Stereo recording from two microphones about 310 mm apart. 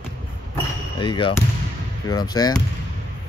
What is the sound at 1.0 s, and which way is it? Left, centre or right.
Speech, centre.